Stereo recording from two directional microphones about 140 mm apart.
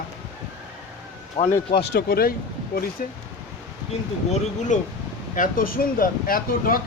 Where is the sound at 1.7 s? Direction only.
90° left.